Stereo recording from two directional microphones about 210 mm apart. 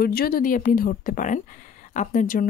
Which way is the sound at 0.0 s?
45° left (ahead or behind).